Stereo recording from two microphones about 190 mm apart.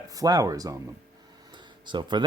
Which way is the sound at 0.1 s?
20° right (ahead or behind).